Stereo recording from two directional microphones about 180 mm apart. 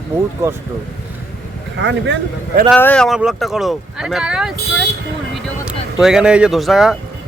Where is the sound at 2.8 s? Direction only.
10° left (ahead or behind).